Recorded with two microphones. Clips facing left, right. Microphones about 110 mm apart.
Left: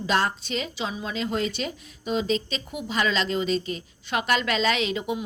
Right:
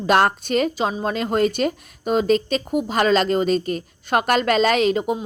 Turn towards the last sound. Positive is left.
turn(degrees=-45)  # may be behind; listen again after turning